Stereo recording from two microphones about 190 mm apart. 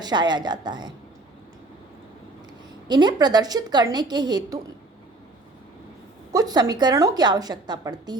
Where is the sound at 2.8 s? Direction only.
20° right (ahead or behind).